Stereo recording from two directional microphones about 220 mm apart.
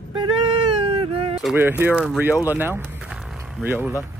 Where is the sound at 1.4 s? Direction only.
10° right (ahead or behind).